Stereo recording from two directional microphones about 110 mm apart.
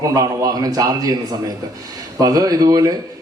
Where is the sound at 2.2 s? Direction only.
35° right (ahead or behind).